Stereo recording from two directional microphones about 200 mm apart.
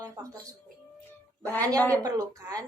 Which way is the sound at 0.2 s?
20° right (ahead or behind).